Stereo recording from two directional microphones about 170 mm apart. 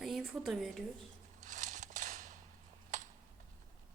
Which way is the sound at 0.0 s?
Centre (ahead or behind).